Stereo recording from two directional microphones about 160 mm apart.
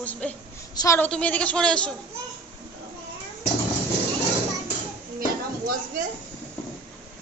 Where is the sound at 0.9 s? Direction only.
10° left (ahead or behind).